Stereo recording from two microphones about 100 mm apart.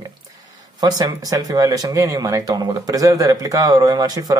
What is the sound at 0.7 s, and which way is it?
Speech, 45° right (ahead or behind).